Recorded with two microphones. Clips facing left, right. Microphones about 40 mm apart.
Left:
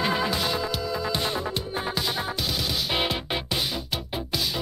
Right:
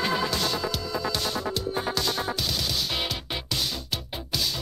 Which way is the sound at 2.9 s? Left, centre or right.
Left.